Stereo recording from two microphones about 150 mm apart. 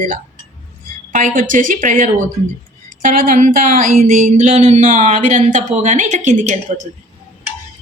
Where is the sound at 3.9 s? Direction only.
50° right (ahead or behind).